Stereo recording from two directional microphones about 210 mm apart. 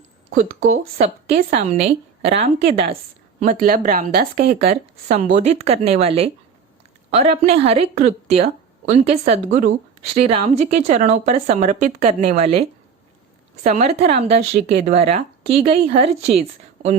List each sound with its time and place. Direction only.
0.7 s a woman's voice: 30° right (ahead or behind)
3.4 s speech: 40° right (ahead or behind)
4.7 s a woman's voice: 35° right (ahead or behind)
13.7 s a woman's voice: 30° right (ahead or behind)